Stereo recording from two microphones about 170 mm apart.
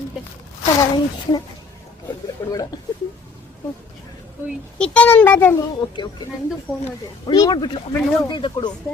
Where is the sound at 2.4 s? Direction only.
20° left (ahead or behind).